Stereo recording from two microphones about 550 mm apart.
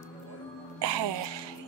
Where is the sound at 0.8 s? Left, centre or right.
Right.